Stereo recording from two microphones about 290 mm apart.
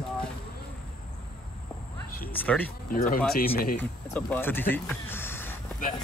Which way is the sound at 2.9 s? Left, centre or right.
Left.